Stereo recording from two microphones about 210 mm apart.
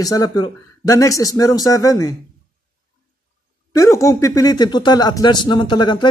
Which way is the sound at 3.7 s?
15° left (ahead or behind).